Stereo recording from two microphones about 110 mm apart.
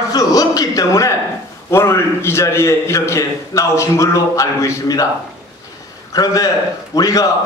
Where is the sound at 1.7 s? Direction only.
25° left (ahead or behind).